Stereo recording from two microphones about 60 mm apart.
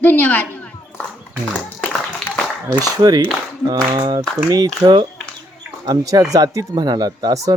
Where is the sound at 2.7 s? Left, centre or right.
Right.